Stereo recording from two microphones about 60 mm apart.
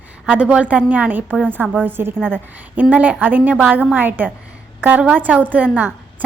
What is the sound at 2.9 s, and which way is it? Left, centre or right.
A woman's voice, right.